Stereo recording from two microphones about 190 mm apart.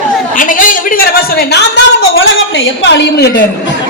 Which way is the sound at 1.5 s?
65° left (ahead or behind).